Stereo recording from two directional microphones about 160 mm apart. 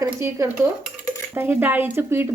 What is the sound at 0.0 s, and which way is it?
Speech, 20° right (ahead or behind).